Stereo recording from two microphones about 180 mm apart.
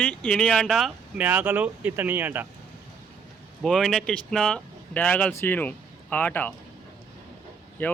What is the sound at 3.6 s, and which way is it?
Speech, centre (ahead or behind).